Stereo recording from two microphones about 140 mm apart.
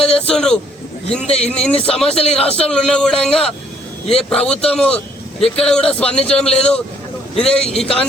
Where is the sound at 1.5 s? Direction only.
5° left (ahead or behind).